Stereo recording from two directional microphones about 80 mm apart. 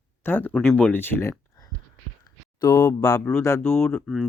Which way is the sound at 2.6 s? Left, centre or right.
Left.